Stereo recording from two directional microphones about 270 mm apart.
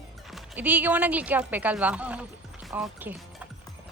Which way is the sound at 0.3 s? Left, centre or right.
Centre.